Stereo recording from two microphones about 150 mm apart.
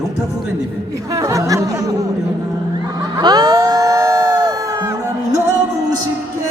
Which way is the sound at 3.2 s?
25° right (ahead or behind).